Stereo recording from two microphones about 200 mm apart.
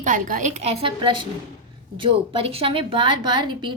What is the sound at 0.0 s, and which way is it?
A woman's voice, 40° right (ahead or behind).